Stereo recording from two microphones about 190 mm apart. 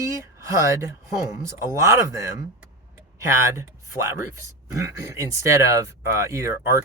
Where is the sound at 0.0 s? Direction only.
15° right (ahead or behind).